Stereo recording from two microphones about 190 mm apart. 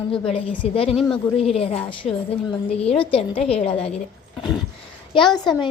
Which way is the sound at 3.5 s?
35° left (ahead or behind).